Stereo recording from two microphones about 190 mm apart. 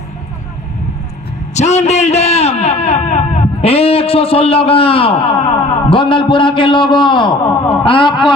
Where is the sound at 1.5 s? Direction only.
35° left (ahead or behind).